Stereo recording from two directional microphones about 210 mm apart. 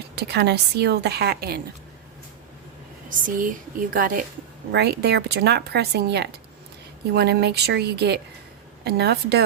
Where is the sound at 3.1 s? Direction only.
40° right (ahead or behind).